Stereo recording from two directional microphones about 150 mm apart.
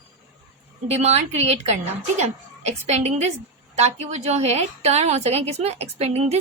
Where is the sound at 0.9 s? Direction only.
45° right (ahead or behind).